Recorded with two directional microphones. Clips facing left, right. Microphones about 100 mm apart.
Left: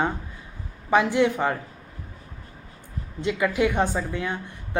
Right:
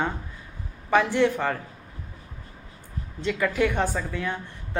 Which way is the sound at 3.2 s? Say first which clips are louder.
Left 1 dB; 15° left (ahead or behind).